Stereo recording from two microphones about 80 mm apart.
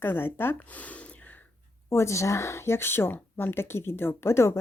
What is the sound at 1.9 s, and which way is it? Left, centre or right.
Speech, left.